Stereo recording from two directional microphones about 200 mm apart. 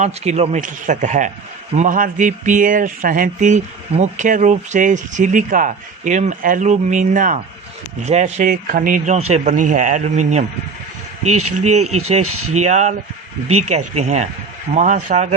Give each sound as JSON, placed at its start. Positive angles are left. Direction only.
{"t": 0.0, "sound": "speech", "side_deg": -35}
{"t": 11.5, "sound": "speech", "side_deg": -35}
{"t": 12.2, "sound": "speech", "side_deg": -90}
{"t": 12.5, "sound": "speech", "side_deg": -35}